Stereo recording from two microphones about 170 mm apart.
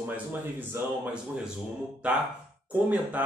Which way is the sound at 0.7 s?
5° right (ahead or behind).